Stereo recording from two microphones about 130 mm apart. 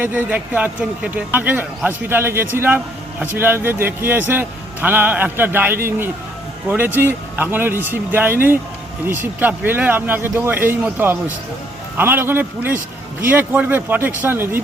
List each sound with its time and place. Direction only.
0.0 s a man's voice: 15° right (ahead or behind)